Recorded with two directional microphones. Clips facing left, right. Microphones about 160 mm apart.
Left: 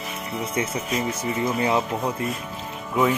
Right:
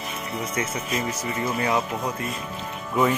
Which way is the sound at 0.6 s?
25° left (ahead or behind).